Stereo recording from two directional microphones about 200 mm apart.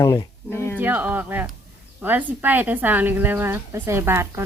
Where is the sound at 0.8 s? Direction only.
10° right (ahead or behind).